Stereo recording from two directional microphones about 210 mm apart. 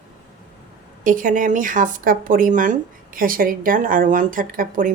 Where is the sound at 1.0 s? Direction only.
40° right (ahead or behind).